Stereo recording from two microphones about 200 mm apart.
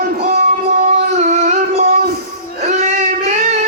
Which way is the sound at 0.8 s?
40° right (ahead or behind).